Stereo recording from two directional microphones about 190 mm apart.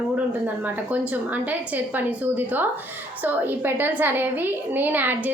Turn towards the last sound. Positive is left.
turn(degrees=-10)  # may be behind; listen again after turning